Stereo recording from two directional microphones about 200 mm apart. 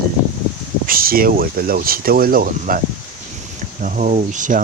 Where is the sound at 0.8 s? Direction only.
45° right (ahead or behind).